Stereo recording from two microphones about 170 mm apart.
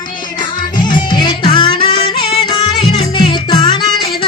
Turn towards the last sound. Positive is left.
turn(degrees=25)  # may be behind; listen again after turning